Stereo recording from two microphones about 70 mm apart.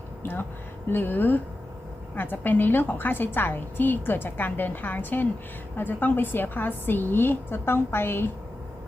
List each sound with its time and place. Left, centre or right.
0.2 s a woman's voice: left